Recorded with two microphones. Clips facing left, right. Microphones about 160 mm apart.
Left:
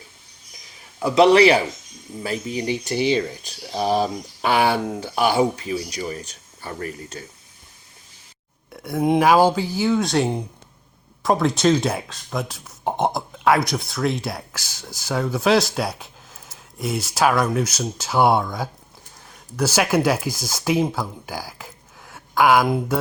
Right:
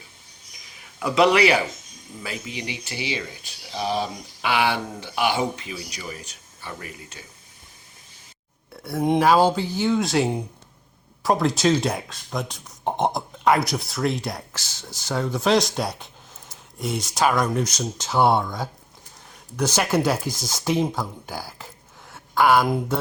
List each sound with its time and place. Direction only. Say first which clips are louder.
0.9 s speech: left 4 dB; 30° left (ahead or behind)
8.8 s speech: left 2 dB; 15° left (ahead or behind)
19.5 s speech: left 2 dB; 10° left (ahead or behind)
22.1 s a sound: left 1 dB; 10° left (ahead or behind)
22.6 s speech: left 2 dB; 5° left (ahead or behind)